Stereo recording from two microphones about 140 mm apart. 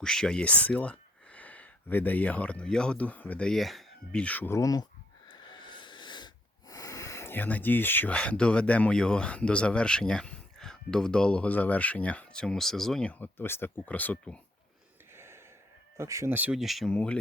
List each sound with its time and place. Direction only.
0.0 s speech: 5° left (ahead or behind); by 4.9 s 25° left (ahead or behind)
5.3 s wheeze: 35° left (ahead or behind); by 14.3 s 10° left (ahead or behind)
15.1 s gasp: 15° right (ahead or behind)
16.0 s speech: 20° right (ahead or behind); by 17.2 s 5° left (ahead or behind)